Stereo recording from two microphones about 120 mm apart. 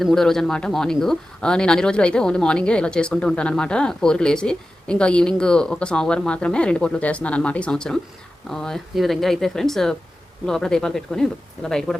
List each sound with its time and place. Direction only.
0.0 s speech: 5° left (ahead or behind)